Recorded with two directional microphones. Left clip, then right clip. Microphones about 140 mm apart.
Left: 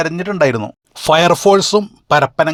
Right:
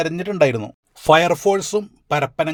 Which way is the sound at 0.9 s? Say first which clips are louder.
Left 3 dB; 30° left (ahead or behind).